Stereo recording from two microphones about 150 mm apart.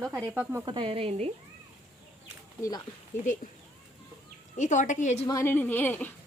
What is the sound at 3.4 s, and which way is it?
Speech, 65° left (ahead or behind).